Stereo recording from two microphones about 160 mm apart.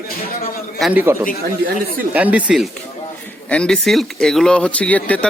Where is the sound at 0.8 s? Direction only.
10° right (ahead or behind).